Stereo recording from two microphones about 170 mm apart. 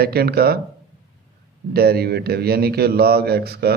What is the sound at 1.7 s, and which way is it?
A man's voice, 65° right (ahead or behind).